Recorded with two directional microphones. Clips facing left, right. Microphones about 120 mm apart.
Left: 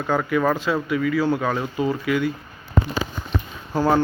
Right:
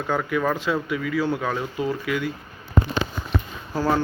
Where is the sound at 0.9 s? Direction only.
5° right (ahead or behind).